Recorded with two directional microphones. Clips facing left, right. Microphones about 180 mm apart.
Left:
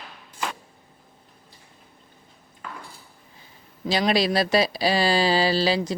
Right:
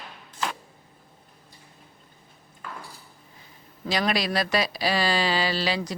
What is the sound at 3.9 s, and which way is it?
Speech, 30° left (ahead or behind).